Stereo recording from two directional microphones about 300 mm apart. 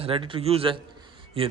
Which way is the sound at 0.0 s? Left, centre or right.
Centre.